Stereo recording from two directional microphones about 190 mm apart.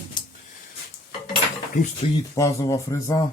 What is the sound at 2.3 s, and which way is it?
Speech, 15° left (ahead or behind).